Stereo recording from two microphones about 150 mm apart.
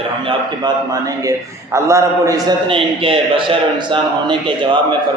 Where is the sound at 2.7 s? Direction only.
35° right (ahead or behind).